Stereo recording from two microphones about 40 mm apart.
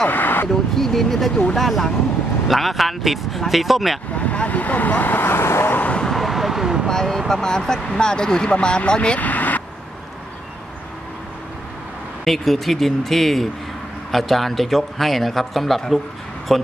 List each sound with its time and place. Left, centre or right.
0.1 s vehicle: left
0.7 s speech: centre
4.2 s speech: left
6.0 s vehicle: centre
6.9 s speech: centre
9.2 s speech: left
12.3 s speech: centre